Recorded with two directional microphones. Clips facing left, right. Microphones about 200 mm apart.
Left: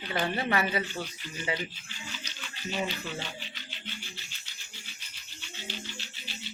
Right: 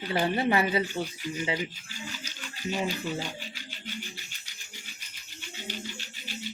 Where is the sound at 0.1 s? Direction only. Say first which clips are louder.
Right 3 dB; 35° right (ahead or behind).